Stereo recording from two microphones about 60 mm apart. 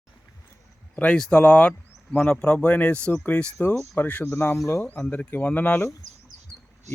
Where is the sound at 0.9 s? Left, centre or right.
Left.